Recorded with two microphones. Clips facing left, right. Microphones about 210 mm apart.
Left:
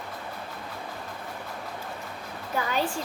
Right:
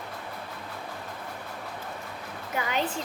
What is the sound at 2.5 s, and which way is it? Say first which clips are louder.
Speech: left 1 dB; 20° right (ahead or behind).